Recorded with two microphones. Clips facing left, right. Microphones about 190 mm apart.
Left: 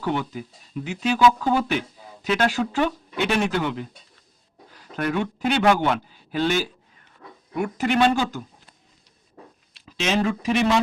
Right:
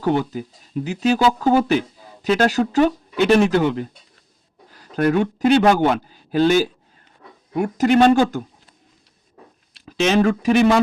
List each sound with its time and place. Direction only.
0.0 s speech: 40° right (ahead or behind)
4.9 s speech: 45° right (ahead or behind)
9.8 s speech: 55° right (ahead or behind)